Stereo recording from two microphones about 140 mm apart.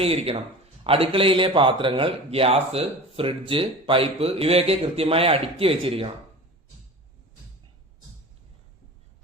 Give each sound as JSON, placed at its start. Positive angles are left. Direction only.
{"t": 0.0, "sound": "a man's voice", "side_deg": -45}